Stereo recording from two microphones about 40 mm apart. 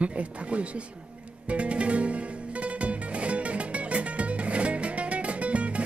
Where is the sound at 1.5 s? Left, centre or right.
Right.